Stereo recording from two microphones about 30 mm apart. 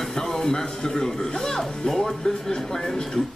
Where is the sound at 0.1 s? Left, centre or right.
Centre.